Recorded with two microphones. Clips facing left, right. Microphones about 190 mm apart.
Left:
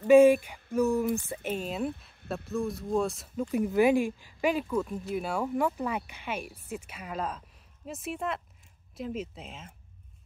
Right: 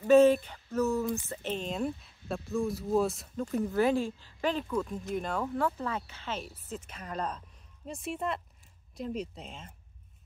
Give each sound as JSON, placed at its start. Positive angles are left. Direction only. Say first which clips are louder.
{"t": 0.0, "sound": "speech", "louder": "left 3 dB", "side_deg": 10}
{"t": 3.5, "sound": "speech", "louder": "left 4 dB", "side_deg": 15}